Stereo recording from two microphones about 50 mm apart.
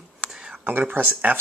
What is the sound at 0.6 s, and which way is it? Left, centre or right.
Speech, right.